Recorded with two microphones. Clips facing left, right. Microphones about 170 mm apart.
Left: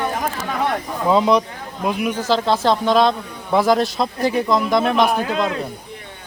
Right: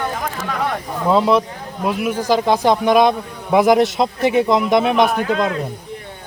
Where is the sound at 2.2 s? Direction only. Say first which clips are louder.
Right 4 dB; 15° right (ahead or behind).